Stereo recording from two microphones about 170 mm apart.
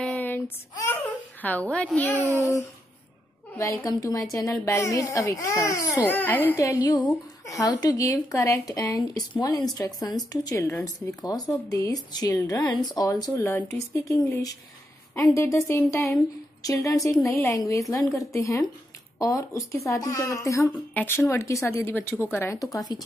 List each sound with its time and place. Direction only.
0.0 s child singing: 10° left (ahead or behind)
1.0 s a woman's voice: 10° left (ahead or behind)